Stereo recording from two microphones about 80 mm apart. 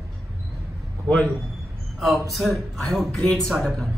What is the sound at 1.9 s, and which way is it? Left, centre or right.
A man's voice, centre.